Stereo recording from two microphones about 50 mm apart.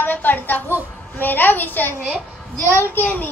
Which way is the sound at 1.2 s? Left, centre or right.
Left.